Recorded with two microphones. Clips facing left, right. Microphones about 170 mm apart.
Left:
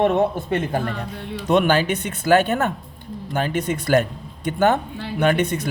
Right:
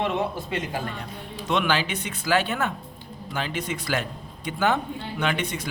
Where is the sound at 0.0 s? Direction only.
50° left (ahead or behind).